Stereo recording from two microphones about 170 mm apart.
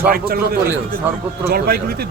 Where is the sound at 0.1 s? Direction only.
65° right (ahead or behind).